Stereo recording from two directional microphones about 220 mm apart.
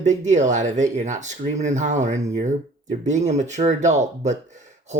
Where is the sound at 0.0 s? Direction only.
35° right (ahead or behind).